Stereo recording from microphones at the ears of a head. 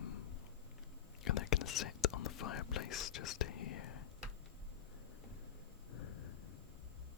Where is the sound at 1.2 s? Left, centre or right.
Left.